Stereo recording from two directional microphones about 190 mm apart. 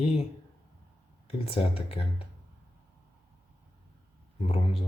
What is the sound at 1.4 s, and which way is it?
Speech, 30° left (ahead or behind).